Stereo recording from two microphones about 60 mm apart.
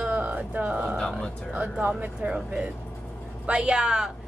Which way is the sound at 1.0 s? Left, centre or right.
Centre.